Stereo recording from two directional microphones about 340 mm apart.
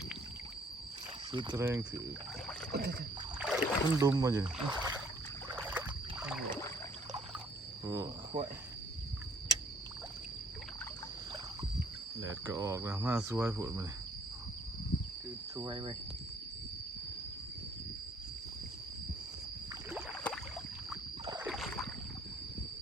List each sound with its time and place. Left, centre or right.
1.3 s speech: centre
2.7 s rowboat: right
3.4 s speech: centre
5.5 s rowboat: centre
7.9 s speech: centre
12.3 s speech: centre
15.5 s speech: centre
19.9 s rowboat: centre
21.5 s boat: centre